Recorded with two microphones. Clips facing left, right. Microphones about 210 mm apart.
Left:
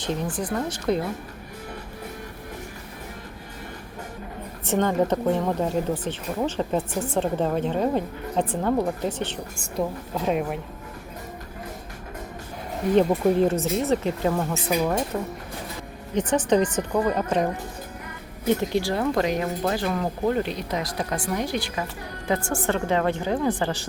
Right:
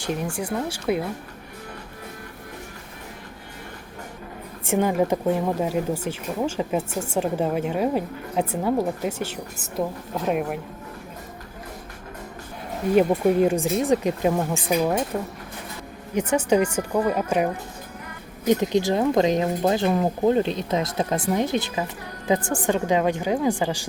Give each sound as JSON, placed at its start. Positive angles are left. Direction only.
{"t": 0.0, "sound": "speech", "side_deg": -10}
{"t": 4.6, "sound": "speech", "side_deg": -10}
{"t": 12.9, "sound": "speech", "side_deg": -10}